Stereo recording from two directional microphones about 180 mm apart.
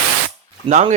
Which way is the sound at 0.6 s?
35° right (ahead or behind).